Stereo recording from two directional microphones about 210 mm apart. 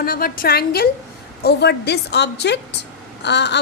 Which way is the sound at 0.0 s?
45° left (ahead or behind).